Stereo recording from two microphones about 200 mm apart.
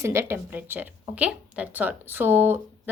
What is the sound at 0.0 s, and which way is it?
A woman's voice, 15° right (ahead or behind).